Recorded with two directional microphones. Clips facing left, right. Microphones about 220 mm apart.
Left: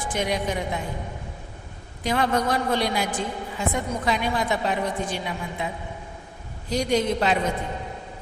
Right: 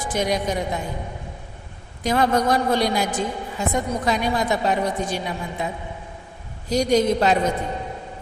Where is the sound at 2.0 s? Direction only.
40° right (ahead or behind).